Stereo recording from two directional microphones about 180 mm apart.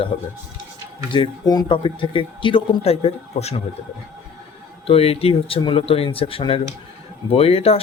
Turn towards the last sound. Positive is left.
turn(degrees=35)  # may be behind; listen again after turning